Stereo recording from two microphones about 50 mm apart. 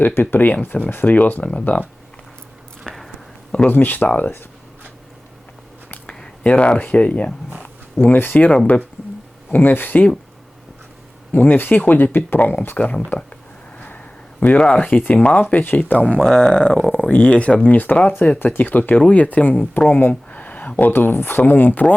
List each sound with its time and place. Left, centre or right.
0.0 s speech: left
2.8 s a sound: centre
3.7 s speech: left
6.4 s speech: left
11.3 s speech: left
12.7 s speech: left
13.1 s a sound: left
14.4 s speech: left
15.4 s speech: left
16.1 s speech: centre; by 20.1 s left
20.3 s speech: left